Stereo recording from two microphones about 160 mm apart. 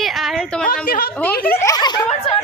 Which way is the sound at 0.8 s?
65° left (ahead or behind).